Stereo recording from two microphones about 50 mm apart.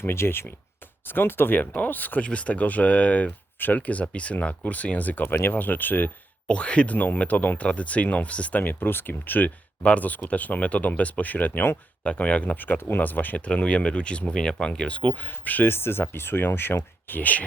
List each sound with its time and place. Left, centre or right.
0.0 s speech: left
2.2 s speech: left
6.5 s speech: left
8.6 s speech: left
13.4 s speech: left
17.1 s speech: left